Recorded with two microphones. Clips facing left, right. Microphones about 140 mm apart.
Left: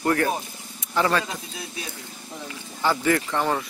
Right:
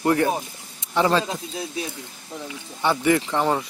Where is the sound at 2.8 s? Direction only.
20° right (ahead or behind).